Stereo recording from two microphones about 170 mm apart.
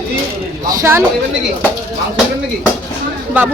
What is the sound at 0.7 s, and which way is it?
Speech, 15° right (ahead or behind).